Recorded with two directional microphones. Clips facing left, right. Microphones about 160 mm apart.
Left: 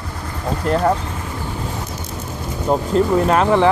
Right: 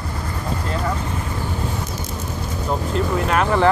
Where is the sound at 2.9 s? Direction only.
40° left (ahead or behind).